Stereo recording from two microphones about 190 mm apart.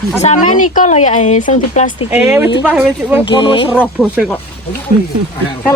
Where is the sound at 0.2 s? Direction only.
40° left (ahead or behind).